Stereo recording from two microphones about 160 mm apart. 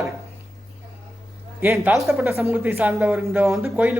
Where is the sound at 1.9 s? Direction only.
Centre (ahead or behind).